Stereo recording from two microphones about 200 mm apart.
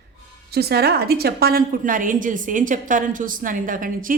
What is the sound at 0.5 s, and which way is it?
Speech, 55° right (ahead or behind).